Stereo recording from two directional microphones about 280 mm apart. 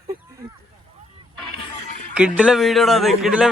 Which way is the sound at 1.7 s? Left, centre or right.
Left.